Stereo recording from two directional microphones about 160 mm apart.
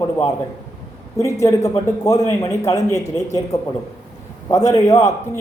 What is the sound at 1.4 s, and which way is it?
A man's voice, 20° left (ahead or behind).